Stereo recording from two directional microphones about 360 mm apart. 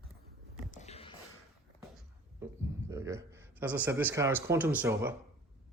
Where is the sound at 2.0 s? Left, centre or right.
Centre.